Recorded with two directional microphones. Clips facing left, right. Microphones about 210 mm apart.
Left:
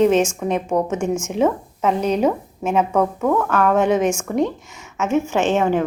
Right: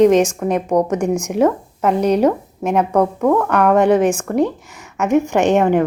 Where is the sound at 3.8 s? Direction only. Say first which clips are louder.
Right 5 dB; 60° right (ahead or behind).